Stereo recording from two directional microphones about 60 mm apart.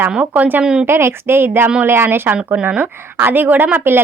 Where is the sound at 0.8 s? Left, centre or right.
Right.